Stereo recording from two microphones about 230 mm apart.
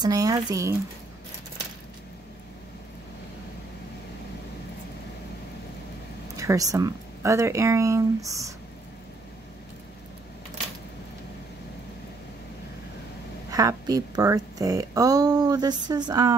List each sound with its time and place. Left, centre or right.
0.0 s speech: centre
6.3 s speech: centre
13.5 s speech: centre